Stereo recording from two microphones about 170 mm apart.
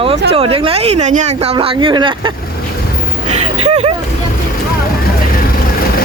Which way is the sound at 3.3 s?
40° right (ahead or behind).